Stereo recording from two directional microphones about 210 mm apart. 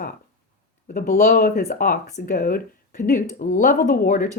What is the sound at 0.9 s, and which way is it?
Speech, 40° left (ahead or behind).